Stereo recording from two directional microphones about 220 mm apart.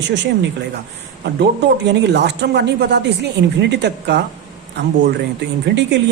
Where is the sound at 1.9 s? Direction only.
50° right (ahead or behind).